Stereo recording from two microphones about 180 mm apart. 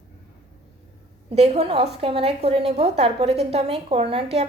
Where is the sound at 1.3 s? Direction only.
35° right (ahead or behind).